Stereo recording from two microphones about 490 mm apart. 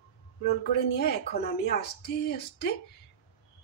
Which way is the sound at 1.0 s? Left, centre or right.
Centre.